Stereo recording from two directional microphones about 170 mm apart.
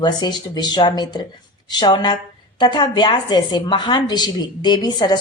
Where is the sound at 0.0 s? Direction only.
25° left (ahead or behind).